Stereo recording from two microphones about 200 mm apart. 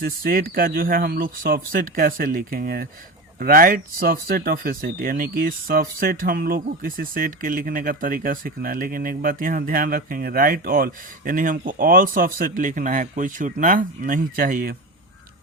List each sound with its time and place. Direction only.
0.0 s speech: 45° right (ahead or behind)